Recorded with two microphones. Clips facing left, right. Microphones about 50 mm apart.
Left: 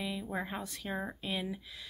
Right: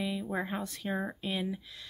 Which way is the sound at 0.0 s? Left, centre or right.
Centre.